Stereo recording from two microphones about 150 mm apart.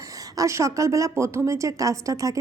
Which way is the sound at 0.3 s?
20° right (ahead or behind).